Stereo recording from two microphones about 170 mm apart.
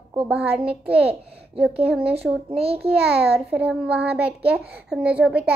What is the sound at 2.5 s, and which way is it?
Speech, 35° right (ahead or behind).